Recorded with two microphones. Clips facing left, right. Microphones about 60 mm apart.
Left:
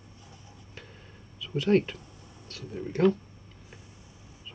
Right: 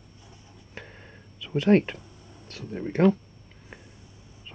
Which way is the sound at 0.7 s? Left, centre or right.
Right.